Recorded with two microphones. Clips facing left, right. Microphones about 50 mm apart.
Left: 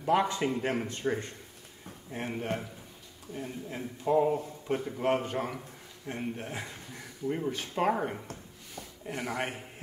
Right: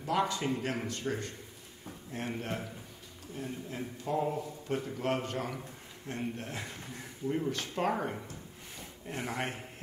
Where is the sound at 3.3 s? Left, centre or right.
Left; by 8.2 s centre.